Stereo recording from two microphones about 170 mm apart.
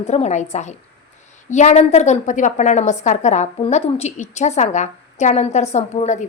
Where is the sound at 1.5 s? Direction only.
45° left (ahead or behind).